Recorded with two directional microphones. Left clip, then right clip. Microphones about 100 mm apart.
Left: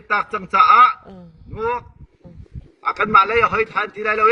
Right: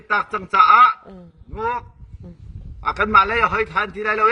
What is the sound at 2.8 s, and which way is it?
A man's voice, 50° right (ahead or behind).